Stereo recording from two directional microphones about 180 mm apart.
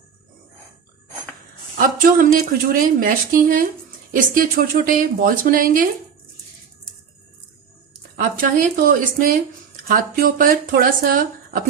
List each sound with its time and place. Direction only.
1.8 s a woman's voice: 50° right (ahead or behind)
8.1 s a woman's voice: 50° right (ahead or behind)